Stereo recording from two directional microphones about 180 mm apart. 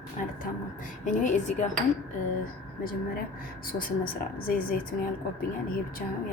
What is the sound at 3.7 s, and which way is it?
Speech, 50° left (ahead or behind).